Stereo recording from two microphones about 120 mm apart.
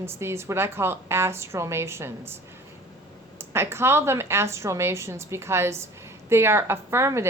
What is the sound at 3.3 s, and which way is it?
A woman's voice, 20° right (ahead or behind).